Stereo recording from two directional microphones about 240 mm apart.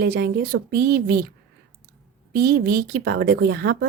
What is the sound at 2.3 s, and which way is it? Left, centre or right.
Speech, right.